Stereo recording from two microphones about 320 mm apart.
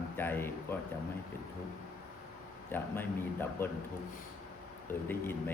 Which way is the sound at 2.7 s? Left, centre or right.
Centre.